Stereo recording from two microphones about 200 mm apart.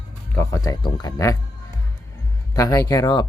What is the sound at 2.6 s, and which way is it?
Speech, 15° left (ahead or behind).